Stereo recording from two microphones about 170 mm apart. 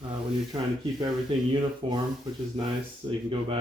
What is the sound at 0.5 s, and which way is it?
Speech, 25° right (ahead or behind).